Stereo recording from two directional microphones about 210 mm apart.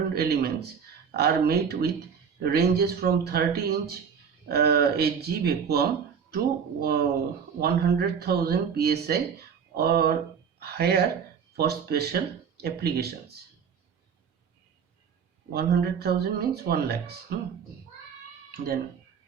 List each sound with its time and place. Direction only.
0.1 s speech: 50° right (ahead or behind)
15.5 s speech: 50° right (ahead or behind)